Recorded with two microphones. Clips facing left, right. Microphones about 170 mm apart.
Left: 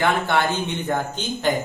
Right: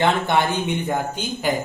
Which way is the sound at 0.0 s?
15° right (ahead or behind).